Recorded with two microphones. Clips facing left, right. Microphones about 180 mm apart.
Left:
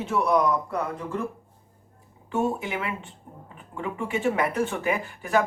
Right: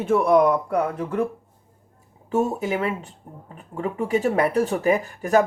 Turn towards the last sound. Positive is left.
turn(degrees=-40)  # may be behind; listen again after turning